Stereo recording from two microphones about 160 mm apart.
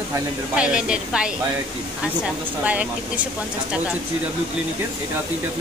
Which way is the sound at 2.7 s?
10° right (ahead or behind).